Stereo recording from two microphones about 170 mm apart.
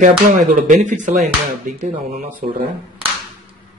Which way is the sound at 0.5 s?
50° right (ahead or behind).